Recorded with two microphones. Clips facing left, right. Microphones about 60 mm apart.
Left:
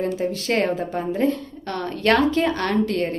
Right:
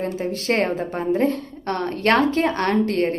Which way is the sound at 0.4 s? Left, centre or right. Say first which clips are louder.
Right 2 dB; right.